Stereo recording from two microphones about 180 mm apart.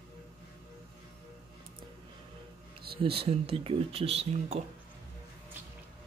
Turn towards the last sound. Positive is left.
turn(degrees=-35)  # may be behind; listen again after turning